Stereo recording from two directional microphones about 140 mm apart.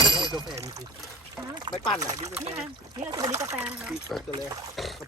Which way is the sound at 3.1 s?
20° right (ahead or behind).